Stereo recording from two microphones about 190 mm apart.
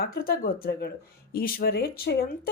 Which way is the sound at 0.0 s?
55° left (ahead or behind).